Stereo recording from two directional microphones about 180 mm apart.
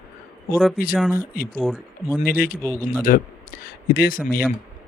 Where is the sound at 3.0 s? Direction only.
55° left (ahead or behind).